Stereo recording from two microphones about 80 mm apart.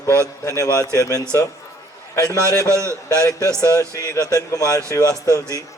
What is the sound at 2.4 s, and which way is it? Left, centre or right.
A man's voice, right.